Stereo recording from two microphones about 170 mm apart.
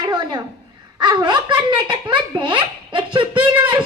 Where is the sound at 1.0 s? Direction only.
25° right (ahead or behind).